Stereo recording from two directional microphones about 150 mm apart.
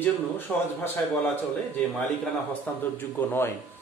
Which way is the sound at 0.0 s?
15° left (ahead or behind).